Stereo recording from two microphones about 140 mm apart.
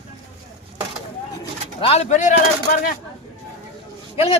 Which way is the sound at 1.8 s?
45° left (ahead or behind).